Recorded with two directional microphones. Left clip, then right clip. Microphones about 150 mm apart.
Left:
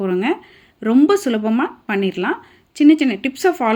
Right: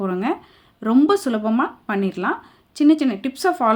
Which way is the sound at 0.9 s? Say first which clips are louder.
Left 3 dB; 5° left (ahead or behind).